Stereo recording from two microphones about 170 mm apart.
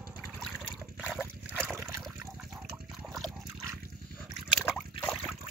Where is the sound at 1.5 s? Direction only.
15° right (ahead or behind).